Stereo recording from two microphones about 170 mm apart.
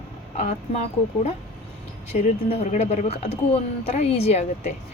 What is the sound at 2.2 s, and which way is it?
Speech, 45° left (ahead or behind).